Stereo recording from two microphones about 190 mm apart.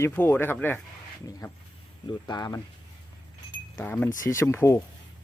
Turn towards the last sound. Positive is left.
turn(degrees=15)  # may be behind; listen again after turning